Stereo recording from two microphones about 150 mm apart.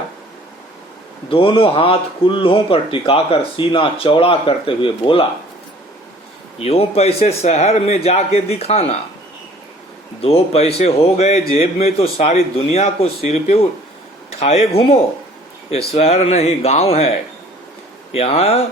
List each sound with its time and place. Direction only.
1.3 s speech: 35° left (ahead or behind)
6.6 s a man's voice: 40° left (ahead or behind)
10.2 s a man's voice: 40° left (ahead or behind)